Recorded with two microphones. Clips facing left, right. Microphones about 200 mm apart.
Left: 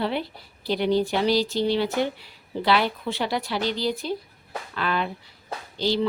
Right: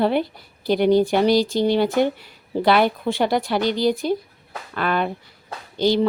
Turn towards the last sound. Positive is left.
turn(degrees=-50)  # may be behind; listen again after turning